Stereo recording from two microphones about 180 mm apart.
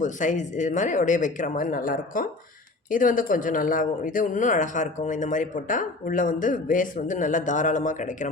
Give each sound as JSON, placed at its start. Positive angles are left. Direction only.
{"t": 0.0, "sound": "speech", "side_deg": 45}